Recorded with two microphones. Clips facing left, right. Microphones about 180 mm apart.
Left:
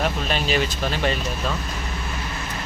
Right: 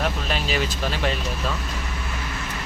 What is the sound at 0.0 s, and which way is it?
Speech, centre (ahead or behind).